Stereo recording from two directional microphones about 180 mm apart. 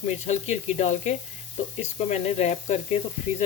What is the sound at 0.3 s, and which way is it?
Speech, 40° left (ahead or behind).